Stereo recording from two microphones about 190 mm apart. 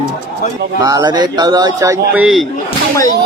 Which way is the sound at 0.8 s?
20° right (ahead or behind).